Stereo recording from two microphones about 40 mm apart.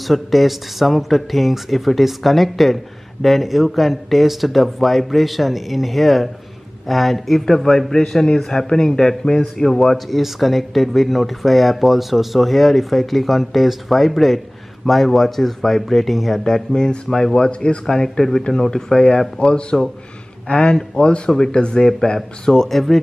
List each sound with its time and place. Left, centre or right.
0.0 s a man's voice: centre
10.0 s speech: centre
16.7 s a man's voice: centre
17.5 s speech: left
17.8 s a man's voice: centre